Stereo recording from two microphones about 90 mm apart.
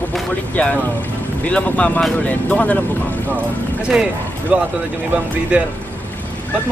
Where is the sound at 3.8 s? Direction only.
10° right (ahead or behind).